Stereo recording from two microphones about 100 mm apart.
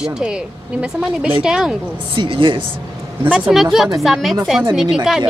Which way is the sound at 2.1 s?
60° right (ahead or behind).